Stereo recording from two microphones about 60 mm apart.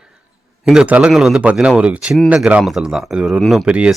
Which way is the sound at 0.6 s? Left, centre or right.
Centre.